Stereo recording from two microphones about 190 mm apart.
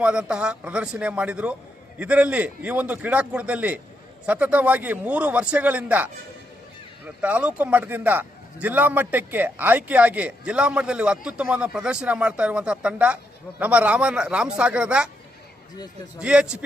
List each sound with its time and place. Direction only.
0.0 s a man's voice: 5° right (ahead or behind)
7.2 s a man's voice: 5° right (ahead or behind)
16.2 s speech: 5° right (ahead or behind)